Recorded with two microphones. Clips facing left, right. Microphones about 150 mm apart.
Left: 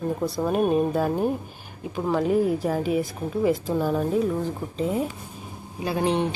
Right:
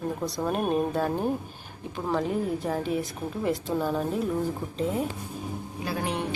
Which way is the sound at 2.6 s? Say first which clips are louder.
Left 4 dB; 5° left (ahead or behind).